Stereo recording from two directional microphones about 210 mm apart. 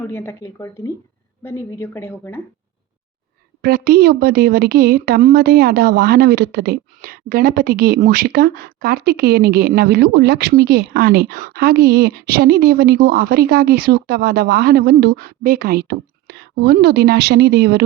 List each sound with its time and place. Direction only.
0.0 s a woman's voice: 10° left (ahead or behind)
3.6 s a woman's voice: 45° right (ahead or behind)